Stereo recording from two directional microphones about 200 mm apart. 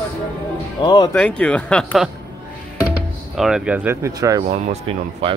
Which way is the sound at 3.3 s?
5° right (ahead or behind).